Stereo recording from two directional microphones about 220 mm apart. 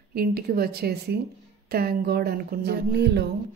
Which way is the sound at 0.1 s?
45° right (ahead or behind).